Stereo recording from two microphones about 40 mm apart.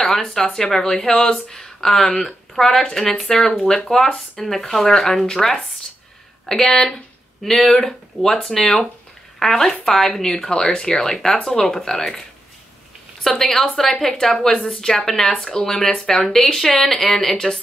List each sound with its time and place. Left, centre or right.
0.0 s speech: centre
13.2 s speech: centre